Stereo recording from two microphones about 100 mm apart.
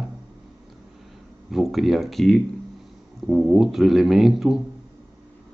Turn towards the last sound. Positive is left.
turn(degrees=-5)  # may be behind; listen again after turning